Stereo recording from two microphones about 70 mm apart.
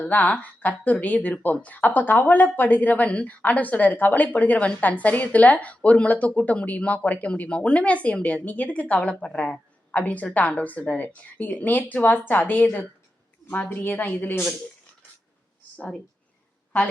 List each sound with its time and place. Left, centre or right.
0.1 s speech: left
13.7 s speech: left